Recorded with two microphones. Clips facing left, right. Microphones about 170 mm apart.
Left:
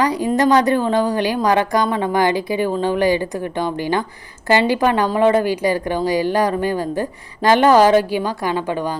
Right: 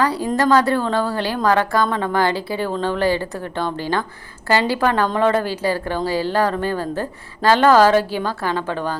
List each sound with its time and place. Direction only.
0.0 s a woman's voice: 15° left (ahead or behind)